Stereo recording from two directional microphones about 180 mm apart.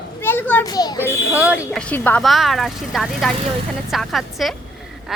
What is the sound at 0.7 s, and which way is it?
Speech, 20° left (ahead or behind).